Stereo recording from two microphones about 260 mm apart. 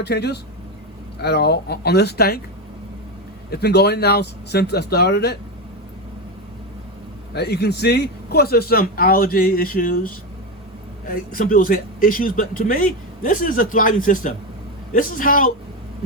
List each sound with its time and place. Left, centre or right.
0.0 s a man's voice: left
3.5 s a man's voice: left
7.3 s a man's voice: left
11.1 s a man's voice: left